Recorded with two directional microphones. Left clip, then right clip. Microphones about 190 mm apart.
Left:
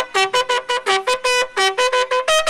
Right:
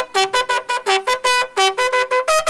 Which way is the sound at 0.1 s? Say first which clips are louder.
Even; 60° right (ahead or behind).